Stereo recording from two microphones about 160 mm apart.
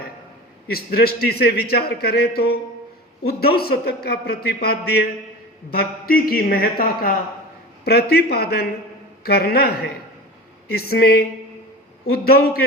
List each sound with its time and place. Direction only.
0.7 s a man's voice: 75° left (ahead or behind)
7.9 s a man's voice: 80° left